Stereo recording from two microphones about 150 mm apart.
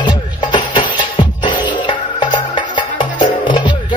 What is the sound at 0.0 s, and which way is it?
Music, 30° left (ahead or behind).